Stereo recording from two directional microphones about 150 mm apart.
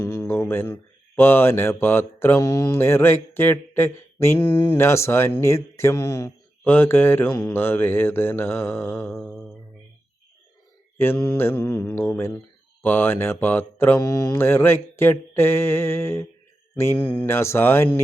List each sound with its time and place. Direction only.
0.0 s speech: 20° left (ahead or behind)
10.9 s speech: 15° left (ahead or behind)